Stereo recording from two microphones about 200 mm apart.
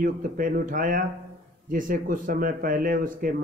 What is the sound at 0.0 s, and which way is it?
Speech, 45° right (ahead or behind).